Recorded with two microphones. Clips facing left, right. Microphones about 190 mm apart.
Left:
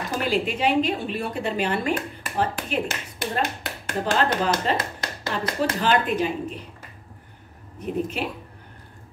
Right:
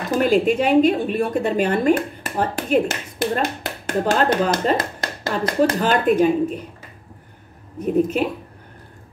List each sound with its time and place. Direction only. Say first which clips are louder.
0.2 s a woman's voice: right 7 dB; 45° right (ahead or behind)
7.8 s a woman's voice: right 8 dB; 45° right (ahead or behind)